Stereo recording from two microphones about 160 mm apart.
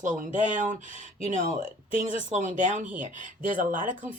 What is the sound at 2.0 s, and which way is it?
Speech, 50° right (ahead or behind).